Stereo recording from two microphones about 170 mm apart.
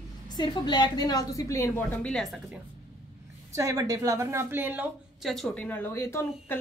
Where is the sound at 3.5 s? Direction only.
20° right (ahead or behind).